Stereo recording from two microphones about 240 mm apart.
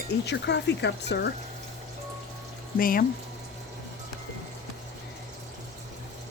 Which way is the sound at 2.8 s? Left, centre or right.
Left.